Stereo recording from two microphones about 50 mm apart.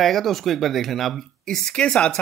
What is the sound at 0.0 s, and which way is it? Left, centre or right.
Speech, centre.